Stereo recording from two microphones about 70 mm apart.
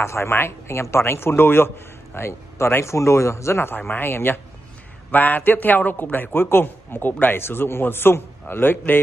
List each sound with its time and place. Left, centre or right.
0.0 s speech: left
3.7 s a man's voice: left